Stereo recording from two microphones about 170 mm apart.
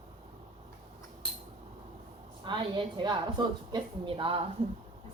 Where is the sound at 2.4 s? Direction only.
30° right (ahead or behind).